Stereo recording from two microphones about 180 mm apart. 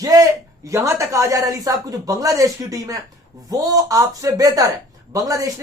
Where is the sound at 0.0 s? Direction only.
20° right (ahead or behind).